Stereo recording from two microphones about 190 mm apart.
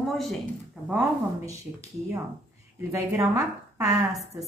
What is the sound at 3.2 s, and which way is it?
Speech, 15° right (ahead or behind).